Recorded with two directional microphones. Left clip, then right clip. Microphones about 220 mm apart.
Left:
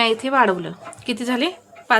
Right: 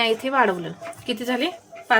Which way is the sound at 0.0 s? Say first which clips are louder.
Left 3 dB; 20° left (ahead or behind).